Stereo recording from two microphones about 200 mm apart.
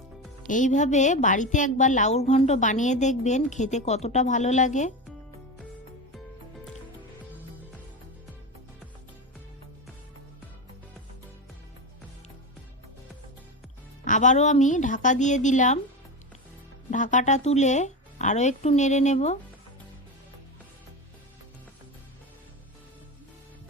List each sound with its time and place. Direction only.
0.4 s a woman's voice: 40° left (ahead or behind)
14.0 s a woman's voice: 40° left (ahead or behind)
16.9 s a woman's voice: 40° left (ahead or behind)